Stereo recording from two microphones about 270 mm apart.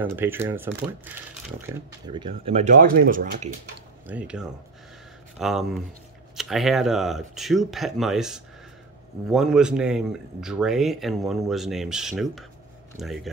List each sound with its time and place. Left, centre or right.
0.0 s speech: centre; by 3.5 s right
4.1 s speech: centre